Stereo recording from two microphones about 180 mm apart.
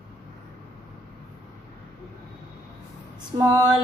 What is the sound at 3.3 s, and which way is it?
Female singing, 20° right (ahead or behind).